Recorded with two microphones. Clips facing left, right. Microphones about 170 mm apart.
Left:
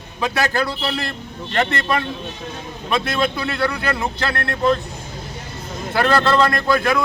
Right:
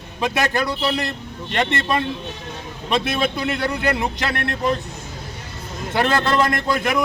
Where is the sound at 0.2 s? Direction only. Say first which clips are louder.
Even; 20° right (ahead or behind).